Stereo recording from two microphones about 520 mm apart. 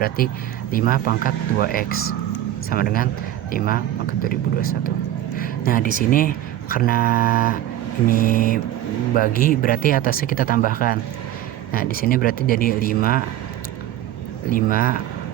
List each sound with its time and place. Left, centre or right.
0.2 s speech: centre
4.2 s speech: centre
14.5 s speech: centre